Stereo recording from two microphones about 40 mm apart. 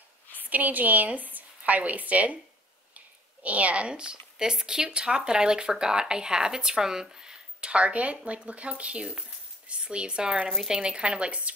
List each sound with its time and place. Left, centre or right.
0.4 s speech: right
3.4 s speech: right; by 7.7 s centre
7.7 s speech: right